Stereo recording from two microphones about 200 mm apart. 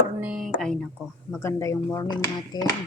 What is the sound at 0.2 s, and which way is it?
Speech, 5° right (ahead or behind).